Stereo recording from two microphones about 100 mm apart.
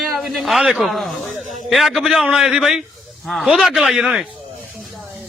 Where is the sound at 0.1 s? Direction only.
Centre (ahead or behind).